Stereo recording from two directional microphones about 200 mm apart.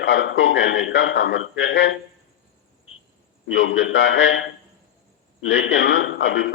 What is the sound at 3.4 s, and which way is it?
Speech, 70° left (ahead or behind).